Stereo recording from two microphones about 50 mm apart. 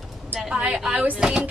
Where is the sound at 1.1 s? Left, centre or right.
Centre.